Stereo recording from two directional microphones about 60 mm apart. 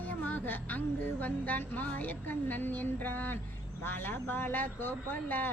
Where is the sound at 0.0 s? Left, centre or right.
Left.